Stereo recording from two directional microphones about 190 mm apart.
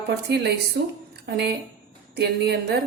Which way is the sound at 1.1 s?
60° right (ahead or behind).